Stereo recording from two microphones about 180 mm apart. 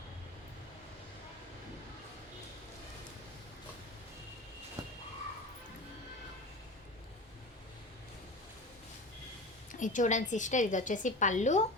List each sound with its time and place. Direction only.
9.8 s a woman's voice: 45° left (ahead or behind)